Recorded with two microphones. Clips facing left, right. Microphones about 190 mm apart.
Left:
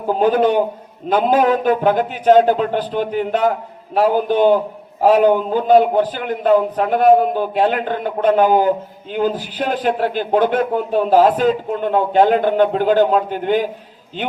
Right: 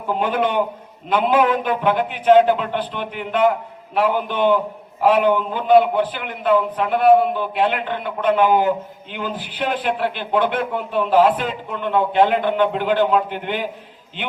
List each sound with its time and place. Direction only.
0.1 s a man's voice: 40° left (ahead or behind)